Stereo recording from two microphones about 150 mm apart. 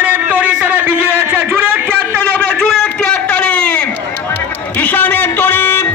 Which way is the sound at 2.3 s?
5° left (ahead or behind).